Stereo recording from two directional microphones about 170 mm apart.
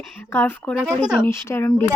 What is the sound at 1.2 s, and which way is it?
Speech, 15° left (ahead or behind).